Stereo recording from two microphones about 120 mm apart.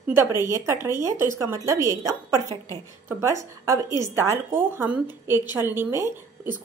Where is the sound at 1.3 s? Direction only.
25° right (ahead or behind).